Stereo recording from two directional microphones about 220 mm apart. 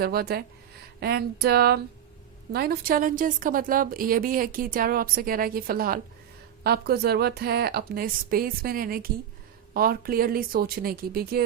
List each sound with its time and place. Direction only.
0.0 s a woman's voice: 45° right (ahead or behind)